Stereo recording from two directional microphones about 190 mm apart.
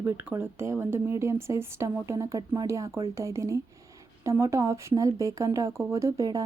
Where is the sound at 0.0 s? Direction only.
15° right (ahead or behind).